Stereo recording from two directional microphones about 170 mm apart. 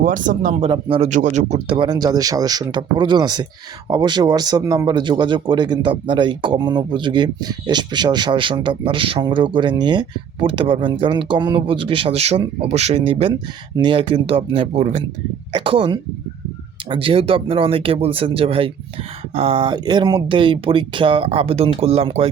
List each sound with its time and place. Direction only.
0.0 s speech: 50° right (ahead or behind)
0.7 s speech: 30° right (ahead or behind)
1.1 s speech: 45° right (ahead or behind)